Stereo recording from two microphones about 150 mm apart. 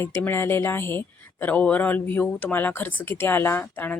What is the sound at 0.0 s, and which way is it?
Speech, 15° left (ahead or behind).